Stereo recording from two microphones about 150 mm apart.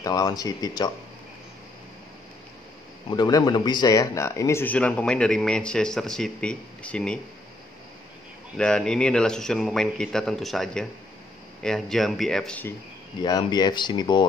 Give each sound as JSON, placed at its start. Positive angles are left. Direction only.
{"t": 0.0, "sound": "speech", "side_deg": 25}
{"t": 3.1, "sound": "speech", "side_deg": 25}
{"t": 8.5, "sound": "a man's voice", "side_deg": 5}
{"t": 13.2, "sound": "speech", "side_deg": 30}